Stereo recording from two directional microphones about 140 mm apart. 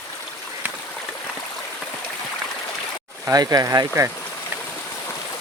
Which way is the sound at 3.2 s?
25° right (ahead or behind).